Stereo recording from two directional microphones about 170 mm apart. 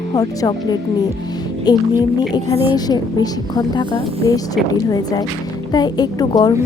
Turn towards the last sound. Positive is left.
turn(degrees=25)  # may be behind; listen again after turning